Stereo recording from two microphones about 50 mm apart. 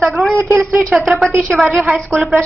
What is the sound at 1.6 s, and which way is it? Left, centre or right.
Speech, right.